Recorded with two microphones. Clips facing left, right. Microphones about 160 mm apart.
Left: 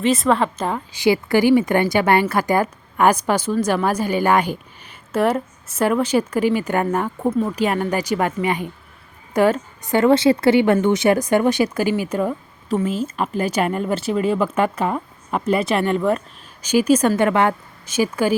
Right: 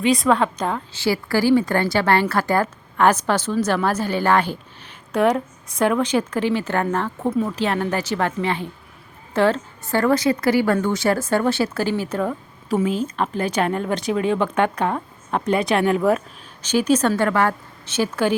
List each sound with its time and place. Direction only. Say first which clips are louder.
0.0 s a woman's voice: even; centre (ahead or behind)
0.9 s a woman's voice: left 5 dB; 20° left (ahead or behind); by 16.2 s 5° right (ahead or behind)
16.6 s a woman's voice: left 2 dB; 10° left (ahead or behind)
17.2 s a woman's voice: left 2 dB; 20° left (ahead or behind)
17.8 s a woman's voice: left 2 dB; 10° left (ahead or behind)